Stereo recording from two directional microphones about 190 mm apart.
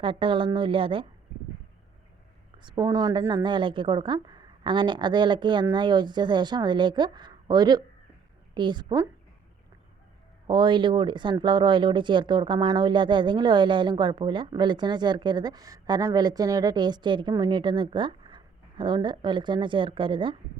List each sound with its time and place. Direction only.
0.0 s speech: 25° right (ahead or behind)
2.6 s speech: 25° right (ahead or behind)
10.4 s speech: 25° right (ahead or behind)